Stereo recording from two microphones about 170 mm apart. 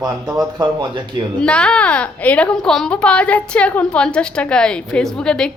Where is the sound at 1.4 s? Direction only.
5° left (ahead or behind).